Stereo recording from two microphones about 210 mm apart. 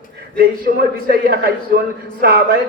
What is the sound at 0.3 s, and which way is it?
A man's voice, 45° right (ahead or behind).